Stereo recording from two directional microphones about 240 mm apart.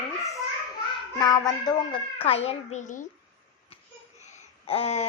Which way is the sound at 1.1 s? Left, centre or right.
Centre.